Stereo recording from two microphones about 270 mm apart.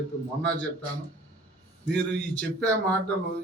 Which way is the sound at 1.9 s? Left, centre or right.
Centre.